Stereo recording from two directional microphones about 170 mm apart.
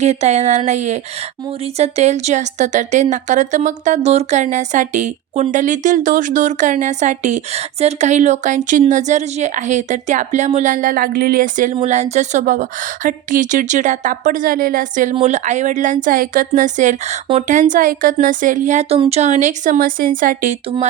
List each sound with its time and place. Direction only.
0.0 s speech: 40° right (ahead or behind)
11.7 s speech: 40° right (ahead or behind)
15.1 s speech: 40° right (ahead or behind)